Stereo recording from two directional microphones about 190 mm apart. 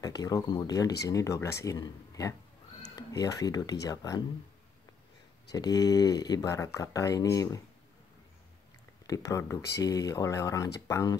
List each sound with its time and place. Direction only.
0.0 s speech: 20° left (ahead or behind)
5.5 s speech: 20° left (ahead or behind)
9.0 s speech: 15° left (ahead or behind)